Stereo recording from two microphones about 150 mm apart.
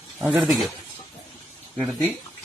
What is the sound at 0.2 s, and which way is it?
Speech, 5° right (ahead or behind).